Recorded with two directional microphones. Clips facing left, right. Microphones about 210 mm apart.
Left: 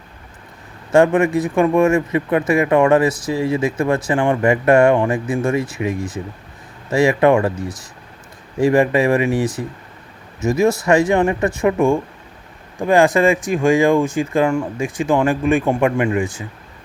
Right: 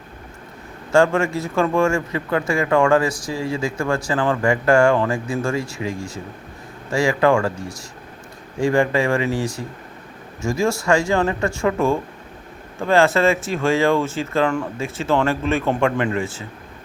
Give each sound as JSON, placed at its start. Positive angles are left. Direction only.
{"t": 0.9, "sound": "speech", "side_deg": 20}
{"t": 8.5, "sound": "speech", "side_deg": 20}